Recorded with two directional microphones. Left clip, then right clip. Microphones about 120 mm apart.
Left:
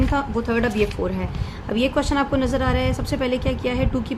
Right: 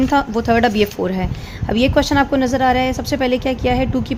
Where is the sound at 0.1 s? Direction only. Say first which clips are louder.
Right 7 dB; 90° right; by 1.3 s 70° right (ahead or behind).